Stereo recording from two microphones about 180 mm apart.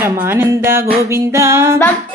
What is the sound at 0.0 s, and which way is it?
Music, 15° right (ahead or behind).